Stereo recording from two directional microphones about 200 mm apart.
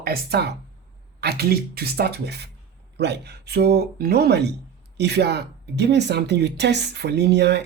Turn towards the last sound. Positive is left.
turn(degrees=-60)  # may be behind; listen again after turning